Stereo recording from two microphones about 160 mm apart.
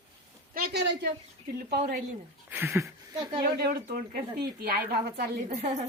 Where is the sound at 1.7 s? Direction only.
75° right (ahead or behind).